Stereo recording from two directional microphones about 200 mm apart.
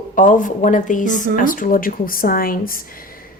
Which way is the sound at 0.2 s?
40° left (ahead or behind).